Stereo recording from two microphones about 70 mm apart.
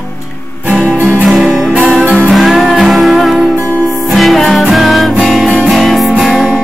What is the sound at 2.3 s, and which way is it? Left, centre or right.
Music, centre.